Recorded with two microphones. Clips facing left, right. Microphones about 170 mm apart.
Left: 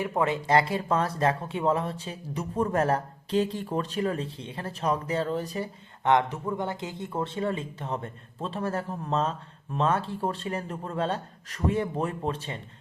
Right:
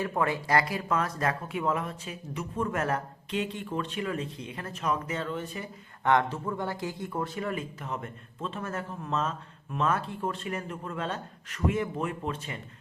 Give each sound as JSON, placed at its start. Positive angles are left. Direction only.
{"t": 0.0, "sound": "speech", "side_deg": 20}
{"t": 6.1, "sound": "speech", "side_deg": 20}